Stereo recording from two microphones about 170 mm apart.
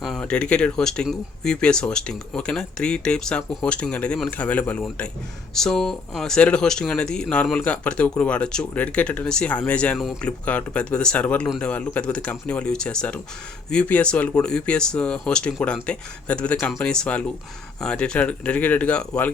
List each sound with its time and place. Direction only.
0.0 s speech: 5° left (ahead or behind)